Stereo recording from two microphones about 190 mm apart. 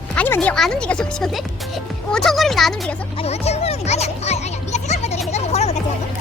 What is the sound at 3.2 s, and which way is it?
Music, 35° left (ahead or behind).